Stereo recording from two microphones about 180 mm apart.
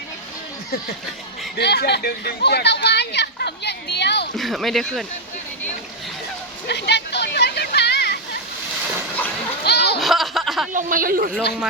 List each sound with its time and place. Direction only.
1.5 s speech: 65° left (ahead or behind)
4.4 s speech: centre (ahead or behind)
6.7 s a sound: 70° left (ahead or behind)
9.6 s splash: 65° left (ahead or behind)
10.0 s a sound: centre (ahead or behind)
10.7 s speech: 45° right (ahead or behind)